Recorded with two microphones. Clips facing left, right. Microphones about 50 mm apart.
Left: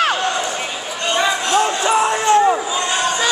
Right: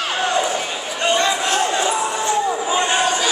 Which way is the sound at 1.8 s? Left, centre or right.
Left.